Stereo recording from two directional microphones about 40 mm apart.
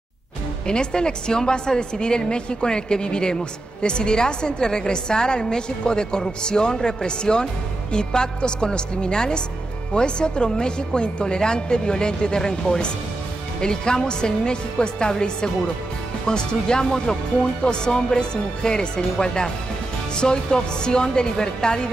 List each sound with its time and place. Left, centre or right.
0.7 s a woman's voice: left